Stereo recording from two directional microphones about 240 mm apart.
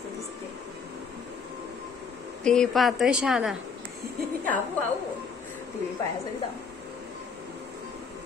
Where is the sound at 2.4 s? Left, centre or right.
Centre.